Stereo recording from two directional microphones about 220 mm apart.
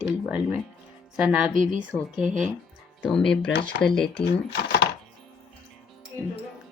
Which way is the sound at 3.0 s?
Centre (ahead or behind).